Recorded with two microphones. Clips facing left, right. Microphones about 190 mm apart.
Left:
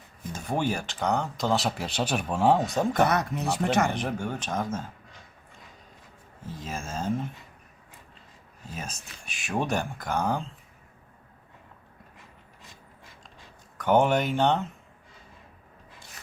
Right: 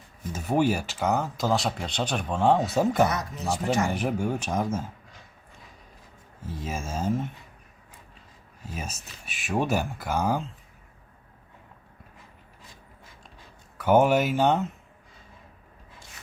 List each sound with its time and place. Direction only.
0.3 s speech: 5° right (ahead or behind)
2.6 s speech: 5° right (ahead or behind)
3.1 s speech: 60° left (ahead or behind)
3.9 s speech: 10° right (ahead or behind)
6.6 s speech: 5° right (ahead or behind)
8.7 s speech: 5° right (ahead or behind)
13.7 s speech: 5° right (ahead or behind)